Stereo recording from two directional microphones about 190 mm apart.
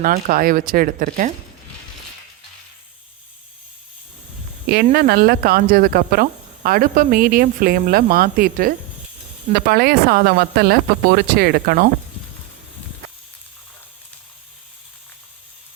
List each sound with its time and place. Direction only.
0.0 s speech: 45° right (ahead or behind)
4.7 s speech: 55° right (ahead or behind)